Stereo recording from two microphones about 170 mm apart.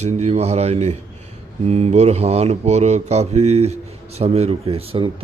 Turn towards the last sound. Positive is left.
turn(degrees=-35)  # may be behind; listen again after turning